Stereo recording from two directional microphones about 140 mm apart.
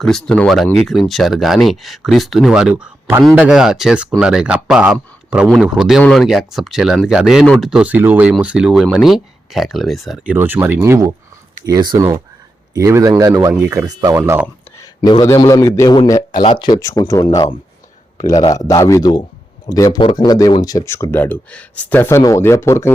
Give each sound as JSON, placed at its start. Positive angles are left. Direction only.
{"t": 0.0, "sound": "a man's voice", "side_deg": 0}
{"t": 14.2, "sound": "speech", "side_deg": -10}
{"t": 14.8, "sound": "a sound", "side_deg": 30}
{"t": 15.4, "sound": "speech", "side_deg": 25}
{"t": 16.4, "sound": "speech", "side_deg": 35}